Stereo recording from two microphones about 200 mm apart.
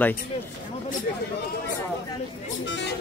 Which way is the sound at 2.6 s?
65° left (ahead or behind).